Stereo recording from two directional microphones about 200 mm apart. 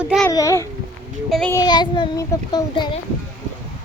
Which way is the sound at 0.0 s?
5° right (ahead or behind).